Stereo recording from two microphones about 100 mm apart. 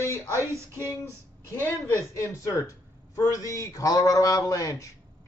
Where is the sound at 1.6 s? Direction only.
25° left (ahead or behind).